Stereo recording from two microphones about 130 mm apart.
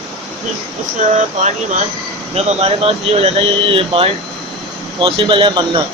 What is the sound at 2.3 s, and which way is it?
Speech, 55° right (ahead or behind).